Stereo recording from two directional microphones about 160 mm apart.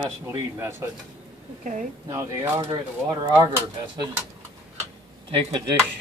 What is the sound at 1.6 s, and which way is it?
Speech, 55° right (ahead or behind).